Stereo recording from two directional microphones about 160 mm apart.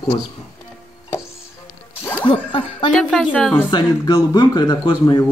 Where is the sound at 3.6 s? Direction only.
25° left (ahead or behind).